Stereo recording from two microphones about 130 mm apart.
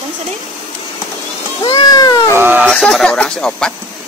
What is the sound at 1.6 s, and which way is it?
Cat, 45° left (ahead or behind).